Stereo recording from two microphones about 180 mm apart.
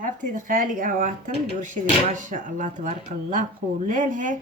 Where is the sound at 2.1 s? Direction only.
45° right (ahead or behind).